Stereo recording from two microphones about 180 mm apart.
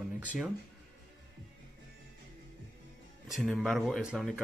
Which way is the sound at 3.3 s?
Centre (ahead or behind).